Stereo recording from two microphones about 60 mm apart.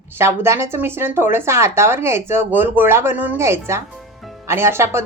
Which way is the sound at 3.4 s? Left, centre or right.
Right.